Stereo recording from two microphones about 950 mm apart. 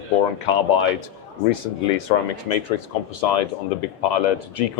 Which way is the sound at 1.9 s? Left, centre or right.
Left.